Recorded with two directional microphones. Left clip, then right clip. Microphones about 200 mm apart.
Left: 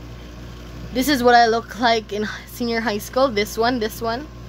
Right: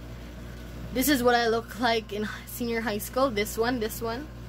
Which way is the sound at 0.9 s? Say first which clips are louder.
Left 9 dB; 25° left (ahead or behind).